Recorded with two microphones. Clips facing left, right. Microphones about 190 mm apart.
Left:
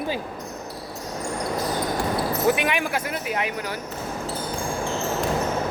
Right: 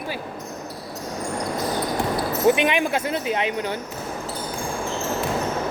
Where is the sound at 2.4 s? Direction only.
20° right (ahead or behind).